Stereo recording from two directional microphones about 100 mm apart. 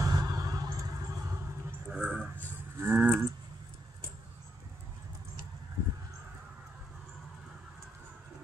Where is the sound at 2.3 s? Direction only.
20° right (ahead or behind).